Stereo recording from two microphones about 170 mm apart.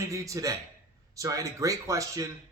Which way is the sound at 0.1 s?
20° right (ahead or behind).